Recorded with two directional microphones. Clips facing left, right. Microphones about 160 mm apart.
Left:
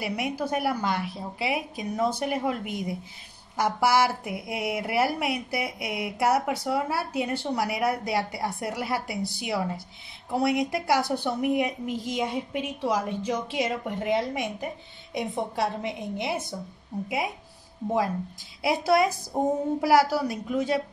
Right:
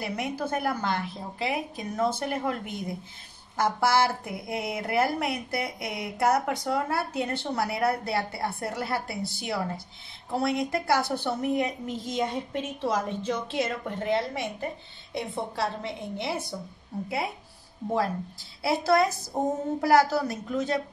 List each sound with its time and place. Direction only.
0.0 s speech: 10° left (ahead or behind)
18.6 s speech: 15° left (ahead or behind)